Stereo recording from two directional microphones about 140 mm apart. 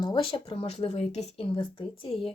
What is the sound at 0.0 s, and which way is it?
A woman's voice, 35° left (ahead or behind).